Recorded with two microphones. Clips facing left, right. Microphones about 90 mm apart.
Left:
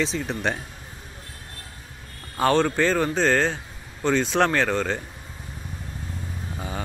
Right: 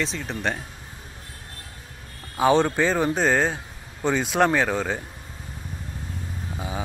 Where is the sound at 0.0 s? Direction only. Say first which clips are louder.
Left 2 dB; centre (ahead or behind).